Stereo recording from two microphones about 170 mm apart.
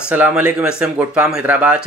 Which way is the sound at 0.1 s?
10° right (ahead or behind).